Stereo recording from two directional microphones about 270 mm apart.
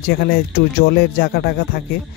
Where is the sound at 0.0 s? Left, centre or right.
Left.